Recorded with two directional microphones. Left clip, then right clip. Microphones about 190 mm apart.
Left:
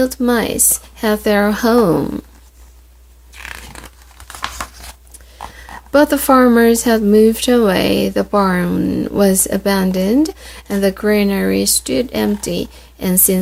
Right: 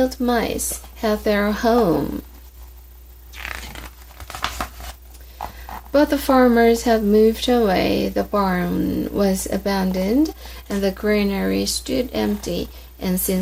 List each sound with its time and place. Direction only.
0.0 s speech: 40° left (ahead or behind)
3.3 s a sound: 10° right (ahead or behind)
5.9 s speech: 40° left (ahead or behind)